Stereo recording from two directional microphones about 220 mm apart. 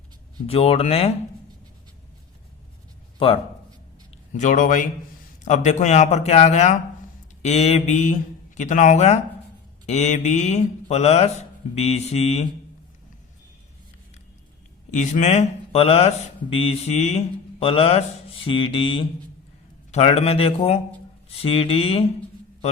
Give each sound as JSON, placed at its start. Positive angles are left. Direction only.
{"t": 0.4, "sound": "speech", "side_deg": 25}
{"t": 4.4, "sound": "speech", "side_deg": 35}
{"t": 14.8, "sound": "speech", "side_deg": 35}